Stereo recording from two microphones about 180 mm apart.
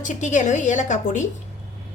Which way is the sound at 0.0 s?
40° left (ahead or behind).